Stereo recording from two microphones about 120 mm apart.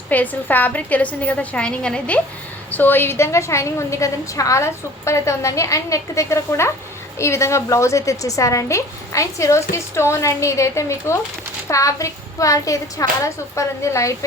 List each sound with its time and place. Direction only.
0.1 s a woman's voice: 15° left (ahead or behind)